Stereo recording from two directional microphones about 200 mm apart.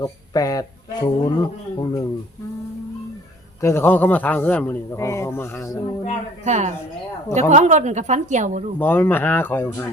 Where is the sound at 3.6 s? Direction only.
10° left (ahead or behind).